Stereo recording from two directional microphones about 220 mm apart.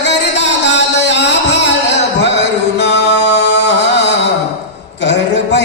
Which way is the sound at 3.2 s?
50° left (ahead or behind).